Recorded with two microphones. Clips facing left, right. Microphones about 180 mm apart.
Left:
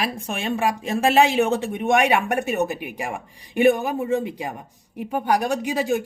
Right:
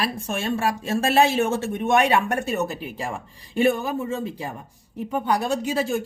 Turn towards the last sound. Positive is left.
turn(degrees=15)  # may be behind; listen again after turning